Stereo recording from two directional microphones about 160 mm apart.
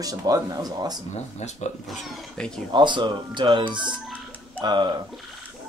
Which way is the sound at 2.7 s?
30° right (ahead or behind).